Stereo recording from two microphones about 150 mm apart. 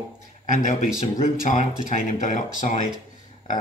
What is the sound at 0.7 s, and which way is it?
Speech, 60° left (ahead or behind).